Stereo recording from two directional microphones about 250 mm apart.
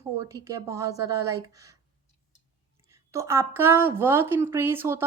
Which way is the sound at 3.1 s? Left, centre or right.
Centre.